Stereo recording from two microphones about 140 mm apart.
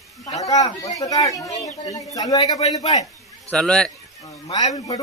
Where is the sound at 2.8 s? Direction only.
45° left (ahead or behind).